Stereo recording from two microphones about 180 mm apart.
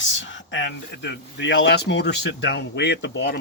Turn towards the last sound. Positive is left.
turn(degrees=75)  # may be behind; listen again after turning